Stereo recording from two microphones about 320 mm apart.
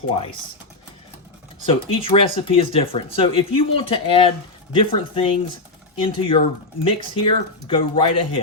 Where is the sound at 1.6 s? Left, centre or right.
Centre.